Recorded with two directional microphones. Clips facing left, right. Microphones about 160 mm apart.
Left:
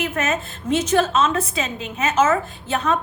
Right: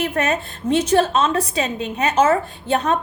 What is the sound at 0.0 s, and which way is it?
A woman's voice, 35° right (ahead or behind).